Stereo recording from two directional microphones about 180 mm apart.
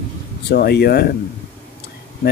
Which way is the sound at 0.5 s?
60° left (ahead or behind).